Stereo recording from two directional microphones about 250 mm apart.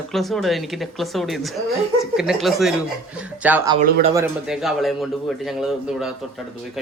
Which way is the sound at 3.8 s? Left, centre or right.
Right.